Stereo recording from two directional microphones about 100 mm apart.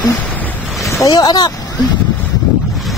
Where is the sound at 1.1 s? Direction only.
40° left (ahead or behind).